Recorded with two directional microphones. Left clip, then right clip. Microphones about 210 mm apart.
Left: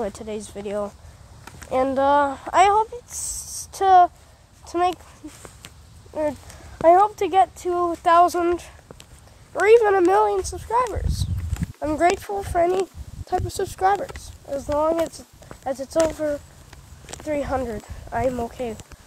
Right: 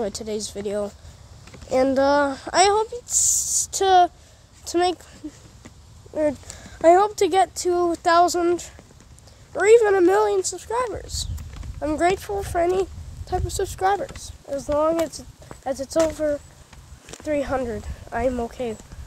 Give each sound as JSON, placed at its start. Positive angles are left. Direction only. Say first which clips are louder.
{"t": 0.0, "sound": "a child's voice", "louder": "right 2 dB", "side_deg": -15}
{"t": 6.1, "sound": "a child's voice", "louder": "right 2 dB", "side_deg": -20}